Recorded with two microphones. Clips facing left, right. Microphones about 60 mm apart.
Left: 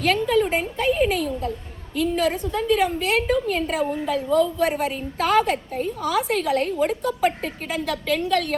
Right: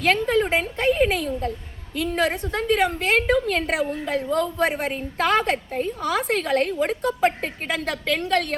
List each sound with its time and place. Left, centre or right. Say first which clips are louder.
0.0 s a woman's voice: even; right
4.1 s a woman's voice: left 5 dB; right